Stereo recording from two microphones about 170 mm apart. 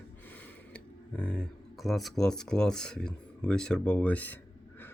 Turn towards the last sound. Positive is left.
turn(degrees=10)  # may be behind; listen again after turning